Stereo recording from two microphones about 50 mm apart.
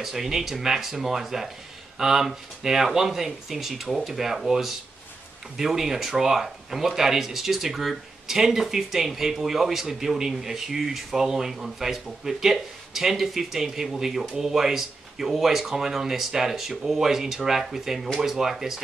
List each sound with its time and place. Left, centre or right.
0.0 s speech: centre